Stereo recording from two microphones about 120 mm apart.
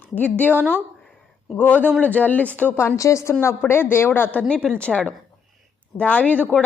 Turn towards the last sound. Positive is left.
turn(degrees=10)  # may be behind; listen again after turning